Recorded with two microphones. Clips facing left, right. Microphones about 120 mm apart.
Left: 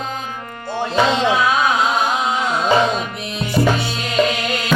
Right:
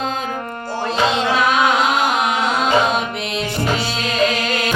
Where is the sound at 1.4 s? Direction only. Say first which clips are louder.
Right 1 dB; 70° right (ahead or behind).